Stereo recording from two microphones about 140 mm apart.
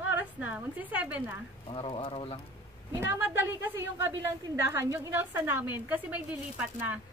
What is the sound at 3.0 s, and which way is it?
A woman's voice, 15° right (ahead or behind).